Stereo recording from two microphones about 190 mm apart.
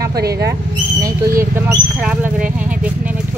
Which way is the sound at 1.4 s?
10° right (ahead or behind).